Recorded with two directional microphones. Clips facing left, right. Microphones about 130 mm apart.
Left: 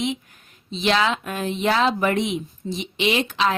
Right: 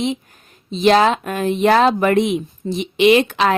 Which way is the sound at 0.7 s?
40° right (ahead or behind).